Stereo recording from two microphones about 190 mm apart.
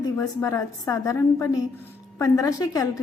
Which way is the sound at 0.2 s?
15° left (ahead or behind).